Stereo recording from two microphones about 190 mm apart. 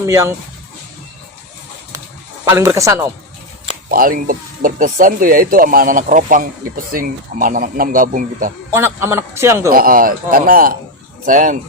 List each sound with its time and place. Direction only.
0.0 s speech: 15° right (ahead or behind)
2.4 s a man's voice: 15° right (ahead or behind)
3.9 s speech: 50° right (ahead or behind)
8.7 s a man's voice: 15° right (ahead or behind)
9.6 s speech: 50° right (ahead or behind)